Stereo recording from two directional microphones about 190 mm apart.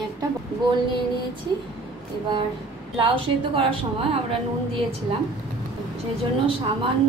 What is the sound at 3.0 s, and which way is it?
A woman's voice, 30° right (ahead or behind).